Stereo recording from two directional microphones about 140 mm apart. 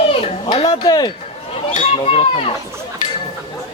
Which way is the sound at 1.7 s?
50° left (ahead or behind).